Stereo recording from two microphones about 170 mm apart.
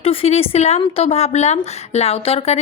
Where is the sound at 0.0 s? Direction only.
35° left (ahead or behind).